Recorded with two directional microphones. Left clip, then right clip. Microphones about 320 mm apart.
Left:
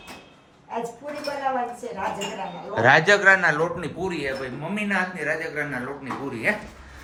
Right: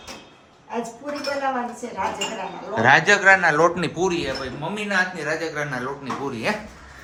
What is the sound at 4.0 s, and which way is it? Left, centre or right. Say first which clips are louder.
Speech: right 7 dB; right.